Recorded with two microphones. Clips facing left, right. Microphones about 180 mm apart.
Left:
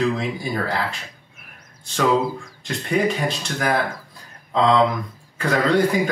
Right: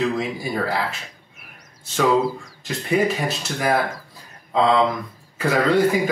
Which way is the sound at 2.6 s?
5° right (ahead or behind).